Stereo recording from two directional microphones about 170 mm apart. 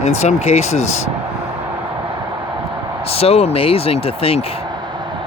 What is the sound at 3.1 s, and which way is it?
Speech, 35° left (ahead or behind).